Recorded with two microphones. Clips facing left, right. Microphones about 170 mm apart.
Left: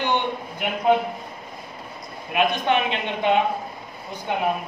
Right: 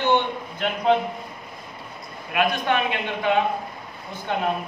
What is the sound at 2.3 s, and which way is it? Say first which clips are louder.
Speech: left 1 dB; 20° left (ahead or behind).